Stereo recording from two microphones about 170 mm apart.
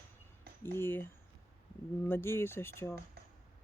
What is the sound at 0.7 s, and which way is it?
Speech, 10° left (ahead or behind).